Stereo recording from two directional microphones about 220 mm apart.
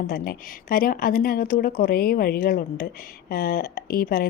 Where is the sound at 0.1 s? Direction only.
40° left (ahead or behind).